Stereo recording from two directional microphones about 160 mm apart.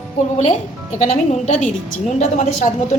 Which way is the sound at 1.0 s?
50° left (ahead or behind).